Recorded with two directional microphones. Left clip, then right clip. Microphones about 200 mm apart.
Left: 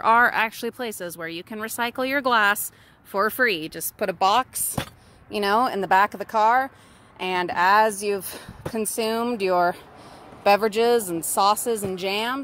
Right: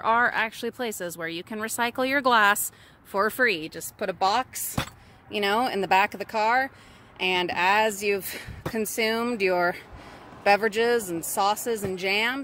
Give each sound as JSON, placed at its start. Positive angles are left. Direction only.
{"t": 0.0, "sound": "speech", "side_deg": 25}
{"t": 0.7, "sound": "speech", "side_deg": 5}